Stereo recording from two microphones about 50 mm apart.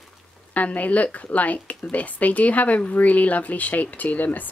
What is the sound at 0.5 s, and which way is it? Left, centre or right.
Speech, left.